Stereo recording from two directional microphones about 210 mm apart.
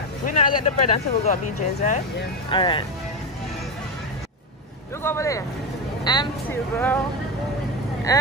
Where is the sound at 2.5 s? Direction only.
25° left (ahead or behind).